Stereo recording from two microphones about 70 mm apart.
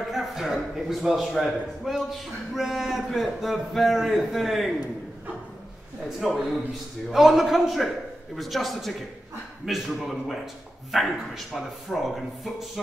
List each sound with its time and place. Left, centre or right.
0.1 s a man's voice: centre
6.0 s a man's voice: centre